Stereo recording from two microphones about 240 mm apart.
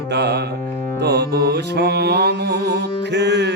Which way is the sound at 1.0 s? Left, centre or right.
Right.